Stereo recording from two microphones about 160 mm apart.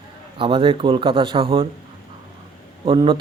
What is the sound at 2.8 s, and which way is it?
Speech, 30° right (ahead or behind).